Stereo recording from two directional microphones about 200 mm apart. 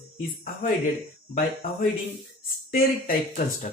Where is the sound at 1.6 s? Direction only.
50° left (ahead or behind).